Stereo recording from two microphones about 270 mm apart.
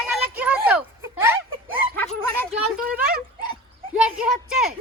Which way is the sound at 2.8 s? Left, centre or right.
Right.